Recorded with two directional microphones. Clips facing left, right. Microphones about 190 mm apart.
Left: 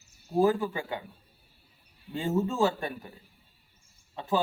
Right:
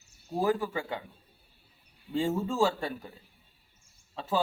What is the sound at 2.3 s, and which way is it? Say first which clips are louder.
Speech: left 3 dB; 20° left (ahead or behind).